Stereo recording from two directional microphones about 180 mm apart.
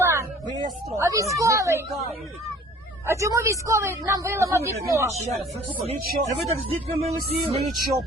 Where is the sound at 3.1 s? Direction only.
15° right (ahead or behind).